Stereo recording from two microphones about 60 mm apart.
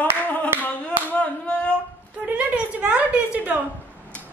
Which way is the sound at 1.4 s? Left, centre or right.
Centre.